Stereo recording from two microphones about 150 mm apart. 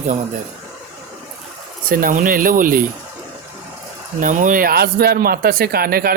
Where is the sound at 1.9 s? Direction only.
70° right (ahead or behind).